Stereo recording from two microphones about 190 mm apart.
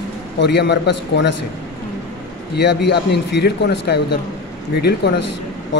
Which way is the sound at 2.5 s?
65° left (ahead or behind).